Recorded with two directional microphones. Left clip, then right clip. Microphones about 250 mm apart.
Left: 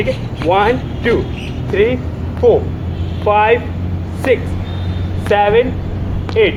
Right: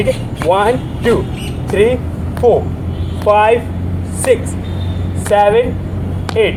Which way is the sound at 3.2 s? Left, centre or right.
Right.